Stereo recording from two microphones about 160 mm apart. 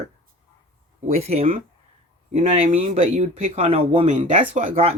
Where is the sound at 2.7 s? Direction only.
40° right (ahead or behind).